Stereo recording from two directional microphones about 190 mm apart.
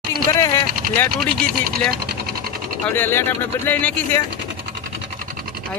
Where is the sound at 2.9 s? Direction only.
10° left (ahead or behind).